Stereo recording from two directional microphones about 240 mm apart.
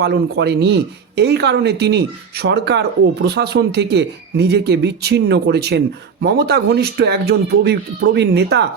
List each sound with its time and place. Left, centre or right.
0.0 s speech: right